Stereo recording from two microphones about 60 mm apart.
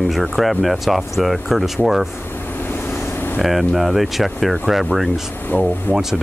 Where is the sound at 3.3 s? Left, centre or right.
Centre.